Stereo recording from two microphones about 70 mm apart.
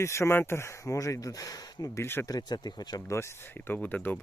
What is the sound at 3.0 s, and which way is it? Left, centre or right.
Speech, left.